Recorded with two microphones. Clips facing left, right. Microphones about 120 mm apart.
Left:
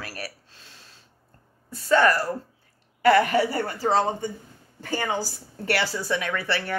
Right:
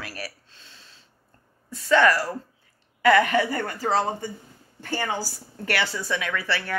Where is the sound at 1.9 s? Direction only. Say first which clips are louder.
Even; 30° left (ahead or behind).